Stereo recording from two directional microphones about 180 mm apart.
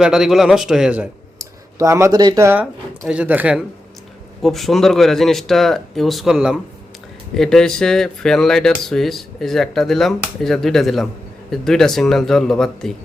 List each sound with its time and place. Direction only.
0.0 s speech: 5° right (ahead or behind)
1.4 s speech: 15° right (ahead or behind); by 12.9 s centre (ahead or behind)